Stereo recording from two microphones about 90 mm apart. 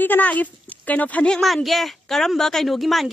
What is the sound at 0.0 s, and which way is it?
A woman's voice, 20° left (ahead or behind).